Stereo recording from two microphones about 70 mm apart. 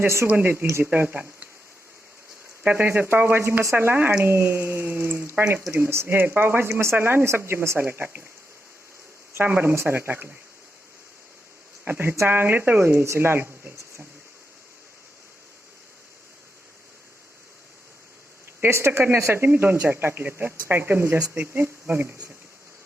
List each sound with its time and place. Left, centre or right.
0.3 s speech: right
2.6 s speech: right
9.3 s speech: right
11.9 s speech: right
18.6 s speech: right